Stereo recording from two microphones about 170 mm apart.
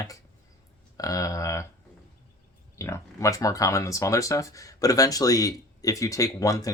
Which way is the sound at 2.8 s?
15° left (ahead or behind).